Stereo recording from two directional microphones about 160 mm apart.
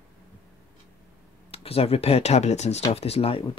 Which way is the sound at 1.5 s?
40° left (ahead or behind).